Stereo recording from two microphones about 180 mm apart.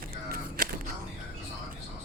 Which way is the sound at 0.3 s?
55° right (ahead or behind).